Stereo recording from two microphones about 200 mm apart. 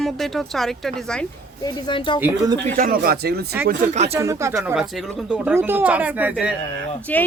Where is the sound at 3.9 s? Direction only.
35° right (ahead or behind).